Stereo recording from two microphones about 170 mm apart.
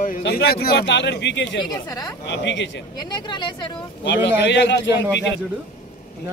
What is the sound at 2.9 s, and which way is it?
Speech, 25° left (ahead or behind).